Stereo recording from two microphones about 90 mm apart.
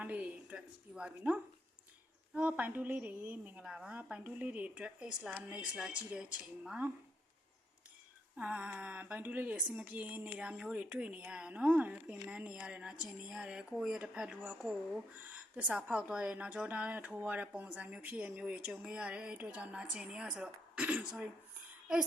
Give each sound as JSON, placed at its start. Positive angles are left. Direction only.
{"t": 0.0, "sound": "a woman's voice", "side_deg": -15}
{"t": 8.4, "sound": "speech", "side_deg": -15}
{"t": 15.3, "sound": "speech", "side_deg": -15}